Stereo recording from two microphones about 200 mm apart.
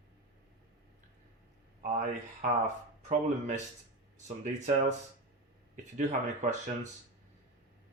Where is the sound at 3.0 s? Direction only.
35° right (ahead or behind).